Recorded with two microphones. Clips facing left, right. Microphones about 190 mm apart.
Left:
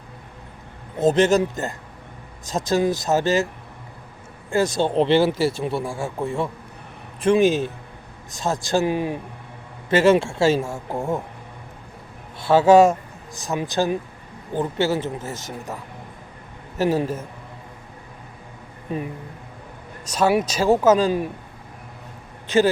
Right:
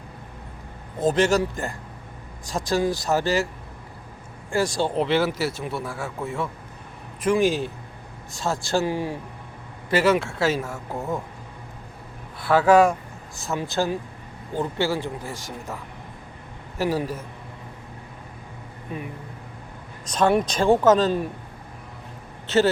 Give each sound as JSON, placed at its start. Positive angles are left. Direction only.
{"t": 0.9, "sound": "speech", "side_deg": 20}
{"t": 4.5, "sound": "speech", "side_deg": 20}
{"t": 12.5, "sound": "speech", "side_deg": 25}
{"t": 20.1, "sound": "speech", "side_deg": 10}
{"t": 22.4, "sound": "speech", "side_deg": 10}